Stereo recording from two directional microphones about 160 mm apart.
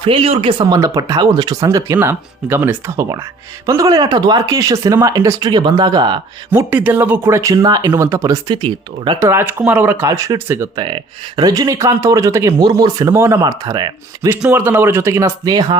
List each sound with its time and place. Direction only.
0.0 s speech: 35° right (ahead or behind)
6.5 s speech: 10° right (ahead or behind)
8.4 s speech: 30° right (ahead or behind)
9.2 s speech: 15° right (ahead or behind)
10.8 s speech: 30° right (ahead or behind)
14.4 s speech: 10° right (ahead or behind)